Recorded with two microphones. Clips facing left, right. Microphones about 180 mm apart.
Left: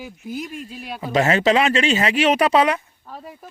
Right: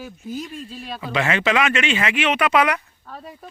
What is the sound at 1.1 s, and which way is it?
Speech, 40° left (ahead or behind).